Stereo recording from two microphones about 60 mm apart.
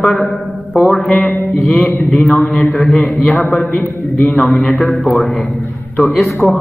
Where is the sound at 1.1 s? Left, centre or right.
Left.